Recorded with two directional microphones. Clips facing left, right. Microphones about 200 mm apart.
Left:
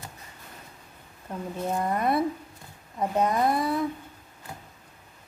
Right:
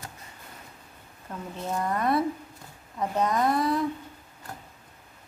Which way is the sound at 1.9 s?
10° left (ahead or behind).